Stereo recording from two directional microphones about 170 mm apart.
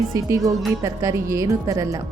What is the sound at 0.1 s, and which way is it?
A woman's voice, 20° right (ahead or behind).